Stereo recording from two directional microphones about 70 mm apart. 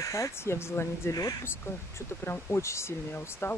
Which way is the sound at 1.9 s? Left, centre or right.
Left.